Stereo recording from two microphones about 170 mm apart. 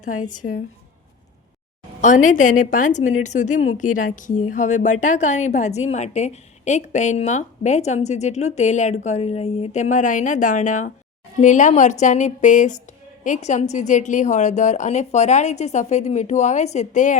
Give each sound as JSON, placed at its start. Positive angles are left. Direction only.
{"t": 0.0, "sound": "a woman's voice", "side_deg": 50}
{"t": 2.0, "sound": "a woman's voice", "side_deg": 45}